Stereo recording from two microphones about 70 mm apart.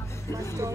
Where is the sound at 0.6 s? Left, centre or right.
Right.